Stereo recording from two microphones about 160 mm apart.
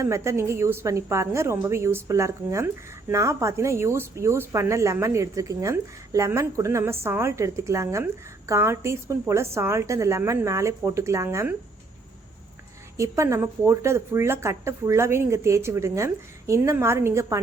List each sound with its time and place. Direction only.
0.0 s speech: 15° right (ahead or behind)
13.0 s speech: 20° right (ahead or behind)